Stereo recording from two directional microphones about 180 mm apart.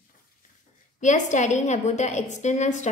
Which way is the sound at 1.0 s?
45° left (ahead or behind).